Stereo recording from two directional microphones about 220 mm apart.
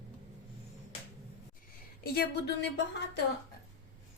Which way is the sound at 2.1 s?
45° left (ahead or behind).